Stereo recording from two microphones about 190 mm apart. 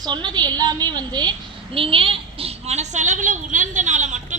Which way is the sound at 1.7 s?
30° right (ahead or behind).